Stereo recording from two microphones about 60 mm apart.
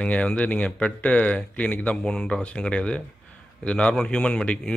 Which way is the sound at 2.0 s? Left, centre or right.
Centre.